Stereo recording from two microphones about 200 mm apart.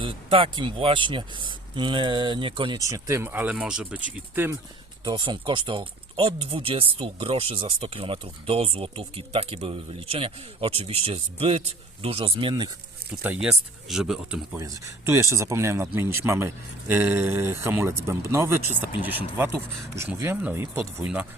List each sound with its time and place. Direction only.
0.0 s speech: 25° right (ahead or behind); by 4.5 s 10° right (ahead or behind)
5.0 s speech: 25° right (ahead or behind)
13.2 s speech: 5° right (ahead or behind)
14.6 s speech: 15° right (ahead or behind)